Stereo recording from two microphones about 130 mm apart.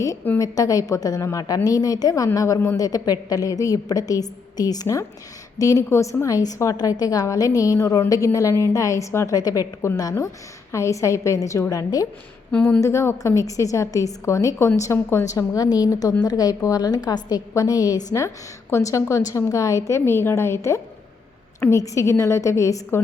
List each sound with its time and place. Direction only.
0.3 s a woman's voice: 30° left (ahead or behind)